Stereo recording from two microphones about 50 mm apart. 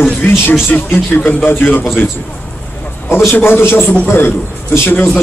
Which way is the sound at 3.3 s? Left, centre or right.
Left.